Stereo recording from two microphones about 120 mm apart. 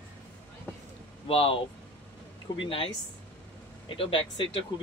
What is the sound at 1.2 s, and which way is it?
Speech, 50° left (ahead or behind).